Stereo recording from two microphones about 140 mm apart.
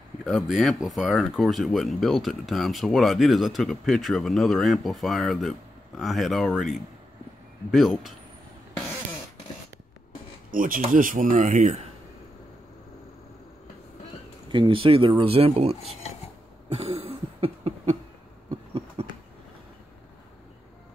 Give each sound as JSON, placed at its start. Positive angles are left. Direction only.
{"t": 0.2, "sound": "speech", "side_deg": -5}
{"t": 10.5, "sound": "speech", "side_deg": -80}
{"t": 14.5, "sound": "speech", "side_deg": -35}
{"t": 16.8, "sound": "cough", "side_deg": -40}
{"t": 19.0, "sound": "a sound", "side_deg": -45}